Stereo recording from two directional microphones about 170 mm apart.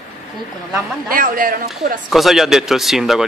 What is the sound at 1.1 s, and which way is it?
Speech, 55° right (ahead or behind).